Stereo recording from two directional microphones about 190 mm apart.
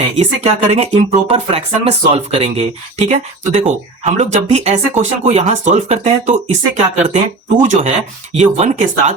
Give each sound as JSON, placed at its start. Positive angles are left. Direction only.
{"t": 0.2, "sound": "speech", "side_deg": -35}